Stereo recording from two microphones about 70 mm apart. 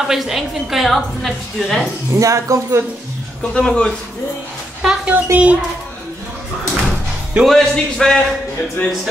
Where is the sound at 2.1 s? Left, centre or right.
Right.